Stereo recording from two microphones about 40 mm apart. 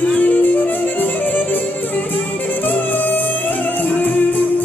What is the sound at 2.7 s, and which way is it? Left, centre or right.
Music, left.